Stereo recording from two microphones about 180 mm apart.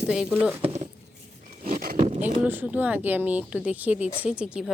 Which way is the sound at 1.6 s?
55° right (ahead or behind).